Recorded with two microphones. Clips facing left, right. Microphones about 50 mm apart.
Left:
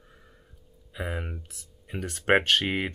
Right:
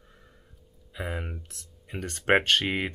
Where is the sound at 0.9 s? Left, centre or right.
Centre.